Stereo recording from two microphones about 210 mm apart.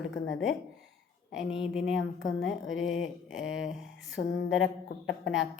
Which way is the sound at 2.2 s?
70° left (ahead or behind).